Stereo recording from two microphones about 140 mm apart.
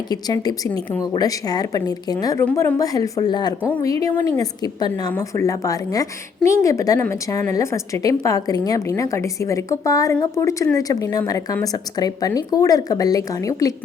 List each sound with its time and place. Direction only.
0.1 s a woman's voice: 30° left (ahead or behind)